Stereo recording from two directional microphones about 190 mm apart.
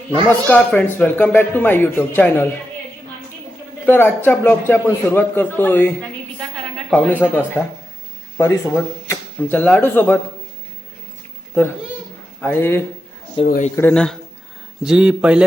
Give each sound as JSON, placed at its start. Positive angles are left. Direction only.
{"t": 0.4, "sound": "a man's voice", "side_deg": 5}
{"t": 3.8, "sound": "a man's voice", "side_deg": 10}
{"t": 12.4, "sound": "a man's voice", "side_deg": 10}
{"t": 13.5, "sound": "speech", "side_deg": 40}
{"t": 13.7, "sound": "speech", "side_deg": 5}